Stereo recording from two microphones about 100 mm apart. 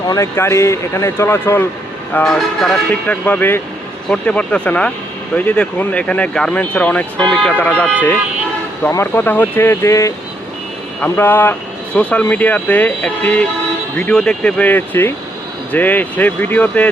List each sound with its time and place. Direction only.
0.2 s speech: 25° left (ahead or behind)
2.2 s speech: 5° left (ahead or behind)
2.9 s speech: 15° left (ahead or behind)
8.9 s speech: 25° left (ahead or behind)